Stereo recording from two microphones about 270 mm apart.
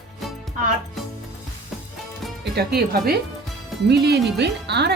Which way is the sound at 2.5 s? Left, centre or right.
Right.